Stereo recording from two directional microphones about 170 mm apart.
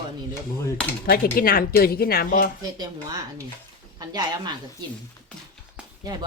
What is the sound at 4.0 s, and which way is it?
Speech, 25° right (ahead or behind).